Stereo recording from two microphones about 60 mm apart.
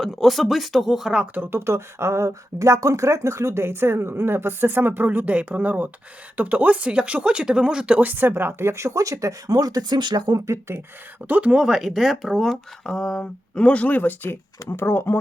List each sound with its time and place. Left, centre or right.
0.0 s speech: centre
1.3 s speech: right
10.3 s speech: right
11.3 s speech: right
11.5 s speech: centre
12.8 s speech: centre
13.7 s speech: left
14.7 s speech: left